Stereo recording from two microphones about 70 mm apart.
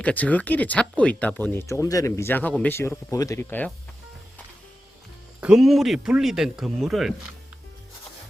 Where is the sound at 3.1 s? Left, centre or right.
Left.